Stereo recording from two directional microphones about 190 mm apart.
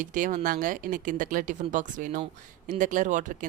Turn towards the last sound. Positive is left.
turn(degrees=-40)  # may be behind; listen again after turning